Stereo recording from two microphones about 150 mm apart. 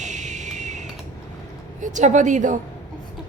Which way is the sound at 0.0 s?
55° right (ahead or behind).